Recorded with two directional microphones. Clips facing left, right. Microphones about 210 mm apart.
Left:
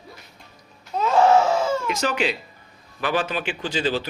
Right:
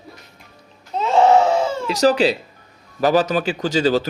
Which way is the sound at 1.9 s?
35° right (ahead or behind).